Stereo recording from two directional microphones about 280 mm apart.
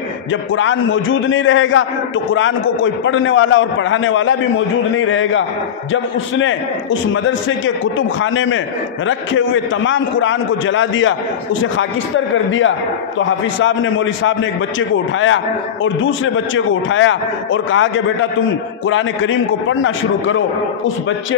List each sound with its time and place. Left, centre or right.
0.3 s a man's voice: left
6.4 s a man's voice: left
12.4 s a man's voice: left